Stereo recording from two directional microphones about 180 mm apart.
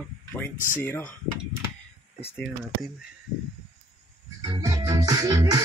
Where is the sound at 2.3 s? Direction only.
Centre (ahead or behind).